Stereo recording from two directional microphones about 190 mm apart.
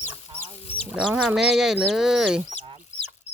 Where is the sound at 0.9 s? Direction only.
5° right (ahead or behind).